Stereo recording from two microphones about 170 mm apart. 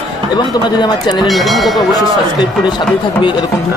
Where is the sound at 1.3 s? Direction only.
Centre (ahead or behind).